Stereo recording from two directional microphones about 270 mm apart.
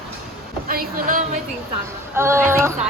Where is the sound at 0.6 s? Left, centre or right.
Right.